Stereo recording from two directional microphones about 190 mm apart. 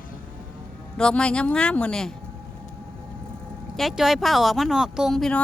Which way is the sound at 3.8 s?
Centre (ahead or behind).